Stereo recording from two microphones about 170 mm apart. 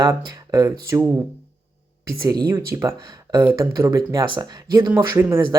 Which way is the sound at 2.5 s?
15° right (ahead or behind).